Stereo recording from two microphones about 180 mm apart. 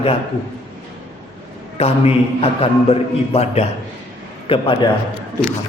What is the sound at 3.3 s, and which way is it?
Speech, 35° left (ahead or behind).